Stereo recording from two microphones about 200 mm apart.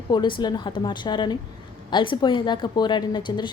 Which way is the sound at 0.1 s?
20° left (ahead or behind).